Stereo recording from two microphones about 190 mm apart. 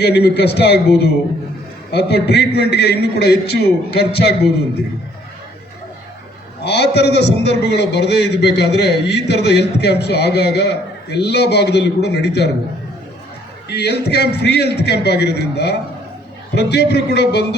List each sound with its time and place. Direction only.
0.0 s a man's voice: 60° left (ahead or behind)
6.6 s a man's voice: 60° left (ahead or behind)
13.7 s a man's voice: 60° left (ahead or behind)